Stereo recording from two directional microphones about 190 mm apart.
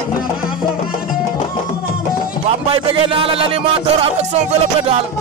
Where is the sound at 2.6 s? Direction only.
30° right (ahead or behind).